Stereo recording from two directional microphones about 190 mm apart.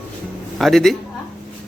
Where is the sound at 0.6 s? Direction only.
Centre (ahead or behind).